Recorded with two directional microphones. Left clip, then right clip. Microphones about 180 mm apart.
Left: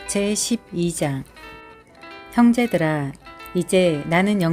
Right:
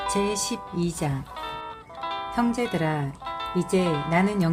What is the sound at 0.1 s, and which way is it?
Speech, 40° left (ahead or behind).